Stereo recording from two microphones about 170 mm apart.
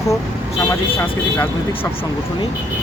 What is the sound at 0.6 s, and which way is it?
Speech, 15° left (ahead or behind).